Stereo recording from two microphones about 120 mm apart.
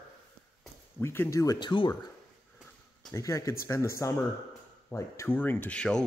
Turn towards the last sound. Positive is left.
turn(degrees=10)  # may be behind; listen again after turning